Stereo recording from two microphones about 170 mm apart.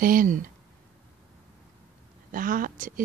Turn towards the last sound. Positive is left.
turn(degrees=-50)  # may be behind; listen again after turning